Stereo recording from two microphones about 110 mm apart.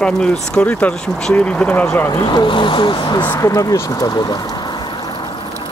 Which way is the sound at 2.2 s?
45° left (ahead or behind).